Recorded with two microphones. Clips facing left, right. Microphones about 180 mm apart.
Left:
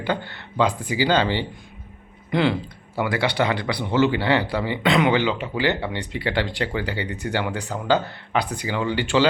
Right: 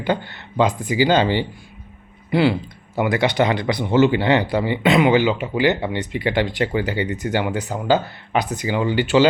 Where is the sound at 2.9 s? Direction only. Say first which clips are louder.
Right 4 dB; 20° right (ahead or behind).